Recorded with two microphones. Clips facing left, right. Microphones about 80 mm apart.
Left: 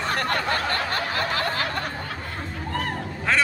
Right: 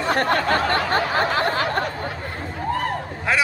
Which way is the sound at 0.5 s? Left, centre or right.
Right.